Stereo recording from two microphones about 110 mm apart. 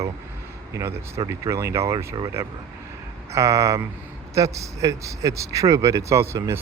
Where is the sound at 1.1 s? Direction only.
25° right (ahead or behind).